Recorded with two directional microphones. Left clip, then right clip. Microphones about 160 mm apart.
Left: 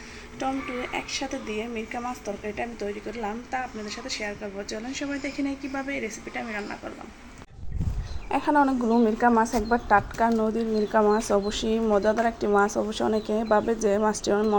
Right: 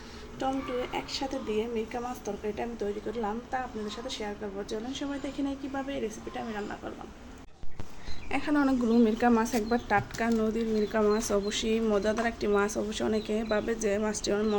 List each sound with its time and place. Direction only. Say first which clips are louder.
0.3 s a woman's voice: left 2 dB; centre (ahead or behind)
8.3 s speech: left 6 dB; 20° left (ahead or behind)
9.1 s speech: left 5 dB; 5° right (ahead or behind); by 14.5 s 15° left (ahead or behind)